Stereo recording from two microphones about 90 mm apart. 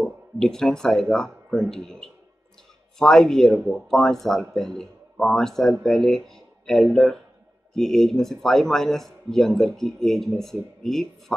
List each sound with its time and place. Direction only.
0.0 s speech: 5° left (ahead or behind)